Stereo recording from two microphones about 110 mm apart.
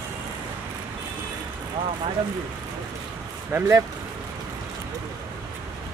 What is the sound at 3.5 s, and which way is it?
Speech, 25° right (ahead or behind).